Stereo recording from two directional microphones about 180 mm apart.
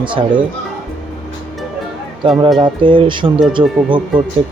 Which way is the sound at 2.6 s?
25° right (ahead or behind).